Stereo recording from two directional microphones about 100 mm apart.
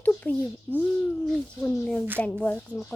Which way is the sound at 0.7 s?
15° left (ahead or behind).